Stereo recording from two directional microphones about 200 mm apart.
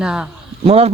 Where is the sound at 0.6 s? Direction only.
30° right (ahead or behind).